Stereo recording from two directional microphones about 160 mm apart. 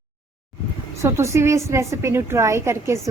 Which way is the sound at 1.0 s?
15° right (ahead or behind).